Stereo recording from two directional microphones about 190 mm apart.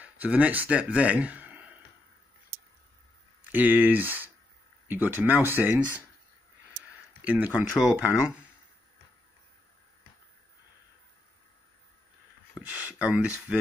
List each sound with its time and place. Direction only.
0.0 s speech: 10° right (ahead or behind)
3.5 s speech: 10° right (ahead or behind)
7.2 s speech: 10° right (ahead or behind)
12.5 s speech: 5° right (ahead or behind)